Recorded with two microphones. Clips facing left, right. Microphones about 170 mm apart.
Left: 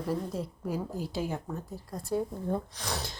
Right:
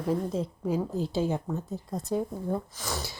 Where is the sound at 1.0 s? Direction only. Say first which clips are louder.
Right 5 dB; 25° right (ahead or behind).